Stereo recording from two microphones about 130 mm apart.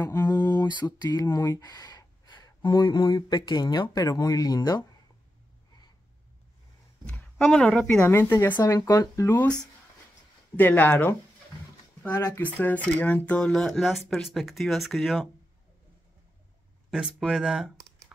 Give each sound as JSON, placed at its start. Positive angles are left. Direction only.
{"t": 0.1, "sound": "mantra", "side_deg": 30}
{"t": 1.3, "sound": "speech", "side_deg": 20}
{"t": 1.7, "sound": "speech", "side_deg": 30}
{"t": 7.1, "sound": "speech", "side_deg": 5}
{"t": 8.1, "sound": "speech", "side_deg": 20}
{"t": 10.5, "sound": "speech", "side_deg": 15}
{"t": 12.5, "sound": "speech", "side_deg": 15}
{"t": 17.3, "sound": "speech", "side_deg": -5}